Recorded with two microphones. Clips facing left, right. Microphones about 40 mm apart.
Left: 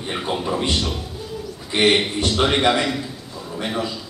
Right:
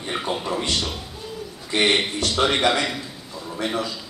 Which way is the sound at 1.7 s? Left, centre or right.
Centre.